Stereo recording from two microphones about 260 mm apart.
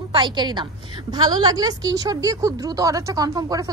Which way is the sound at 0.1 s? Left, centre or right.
Centre.